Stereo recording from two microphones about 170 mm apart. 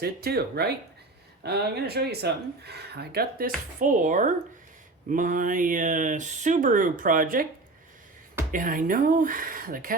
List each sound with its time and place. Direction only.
0.0 s speech: 65° right (ahead or behind)
8.5 s speech: 55° right (ahead or behind)